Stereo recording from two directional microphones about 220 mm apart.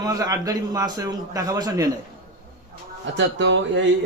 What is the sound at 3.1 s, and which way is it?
Speech, 55° right (ahead or behind).